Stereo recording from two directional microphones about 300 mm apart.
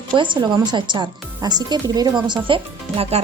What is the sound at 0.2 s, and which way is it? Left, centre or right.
Speech, centre.